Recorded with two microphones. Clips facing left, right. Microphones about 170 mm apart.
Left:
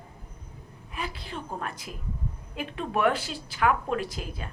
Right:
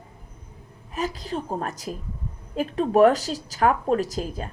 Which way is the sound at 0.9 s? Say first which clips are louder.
Right 8 dB; 40° right (ahead or behind).